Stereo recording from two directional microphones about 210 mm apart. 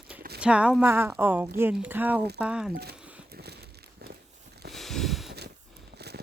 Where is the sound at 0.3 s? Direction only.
5° right (ahead or behind).